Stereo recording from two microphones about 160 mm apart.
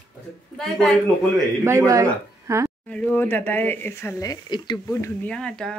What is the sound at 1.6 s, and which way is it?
Speech, 20° right (ahead or behind).